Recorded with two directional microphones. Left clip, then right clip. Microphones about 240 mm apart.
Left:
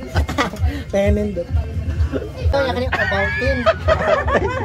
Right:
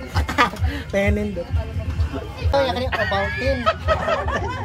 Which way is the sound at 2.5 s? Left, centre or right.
Right.